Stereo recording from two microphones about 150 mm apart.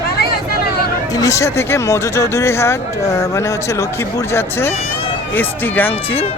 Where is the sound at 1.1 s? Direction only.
20° left (ahead or behind).